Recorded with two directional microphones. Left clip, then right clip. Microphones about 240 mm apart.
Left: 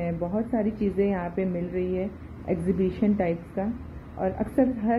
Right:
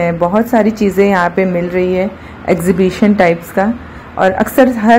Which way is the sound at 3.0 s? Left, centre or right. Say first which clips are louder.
Right 16 dB; centre.